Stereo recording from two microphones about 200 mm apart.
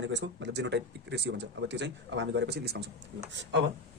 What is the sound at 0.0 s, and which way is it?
Speech, 65° right (ahead or behind).